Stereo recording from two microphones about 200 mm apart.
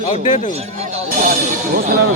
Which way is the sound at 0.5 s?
30° right (ahead or behind).